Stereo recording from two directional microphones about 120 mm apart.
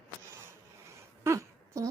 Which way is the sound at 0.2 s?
20° right (ahead or behind).